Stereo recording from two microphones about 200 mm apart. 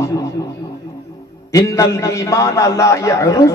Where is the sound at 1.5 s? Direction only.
15° left (ahead or behind).